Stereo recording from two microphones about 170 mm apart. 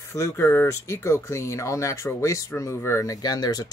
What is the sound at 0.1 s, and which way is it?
Speech, 15° left (ahead or behind).